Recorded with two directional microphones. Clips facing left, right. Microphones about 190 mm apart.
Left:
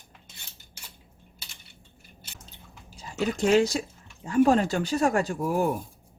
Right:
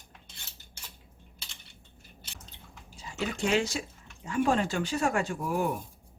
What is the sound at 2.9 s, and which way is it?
Speech, 40° left (ahead or behind).